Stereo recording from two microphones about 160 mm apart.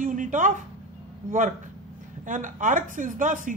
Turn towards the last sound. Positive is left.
turn(degrees=-55)  # may be behind; listen again after turning